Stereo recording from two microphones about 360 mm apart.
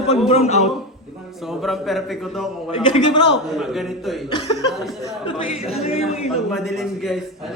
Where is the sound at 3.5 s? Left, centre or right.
Centre.